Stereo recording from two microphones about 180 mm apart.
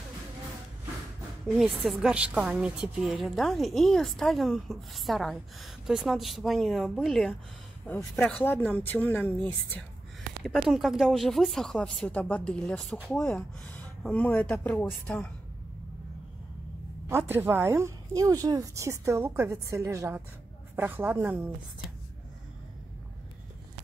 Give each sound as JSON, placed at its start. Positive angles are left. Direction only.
{"t": 1.8, "sound": "a woman's voice", "side_deg": 0}
{"t": 10.4, "sound": "a woman's voice", "side_deg": 0}
{"t": 17.1, "sound": "speech", "side_deg": -15}